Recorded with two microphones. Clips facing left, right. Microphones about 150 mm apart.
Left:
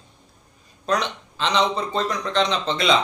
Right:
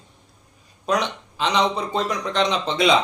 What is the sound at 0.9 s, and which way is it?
Speech, 15° right (ahead or behind).